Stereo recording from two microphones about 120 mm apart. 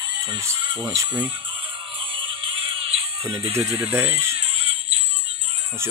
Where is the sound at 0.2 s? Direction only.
30° right (ahead or behind).